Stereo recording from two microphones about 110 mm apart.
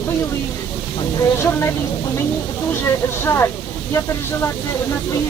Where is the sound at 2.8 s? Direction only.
25° left (ahead or behind).